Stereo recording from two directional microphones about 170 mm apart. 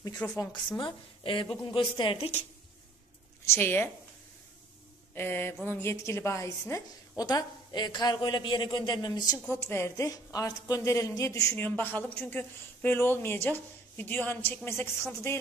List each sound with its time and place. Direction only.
0.0 s a woman's voice: 20° left (ahead or behind)
0.7 s a woman's voice: 30° left (ahead or behind)
3.4 s a woman's voice: 15° left (ahead or behind)
5.1 s a woman's voice: 15° left (ahead or behind)